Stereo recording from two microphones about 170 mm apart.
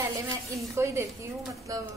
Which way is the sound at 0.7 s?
15° right (ahead or behind).